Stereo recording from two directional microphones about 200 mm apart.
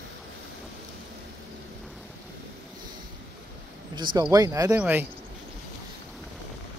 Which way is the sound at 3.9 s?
20° right (ahead or behind).